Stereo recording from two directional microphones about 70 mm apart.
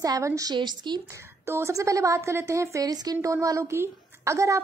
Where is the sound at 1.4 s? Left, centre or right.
Right.